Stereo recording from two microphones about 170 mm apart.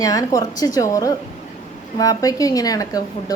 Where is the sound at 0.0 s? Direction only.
20° left (ahead or behind).